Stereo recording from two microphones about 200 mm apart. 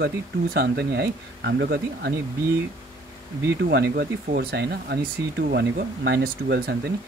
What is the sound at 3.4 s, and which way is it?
Speech, 55° right (ahead or behind).